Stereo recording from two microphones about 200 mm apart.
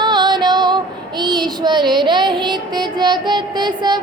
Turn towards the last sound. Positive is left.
turn(degrees=-20)  # may be behind; listen again after turning